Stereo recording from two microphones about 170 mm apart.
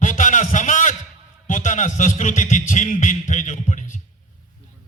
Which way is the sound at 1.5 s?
45° left (ahead or behind).